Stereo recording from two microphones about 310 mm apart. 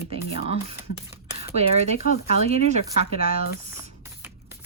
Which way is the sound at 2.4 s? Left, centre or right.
Centre.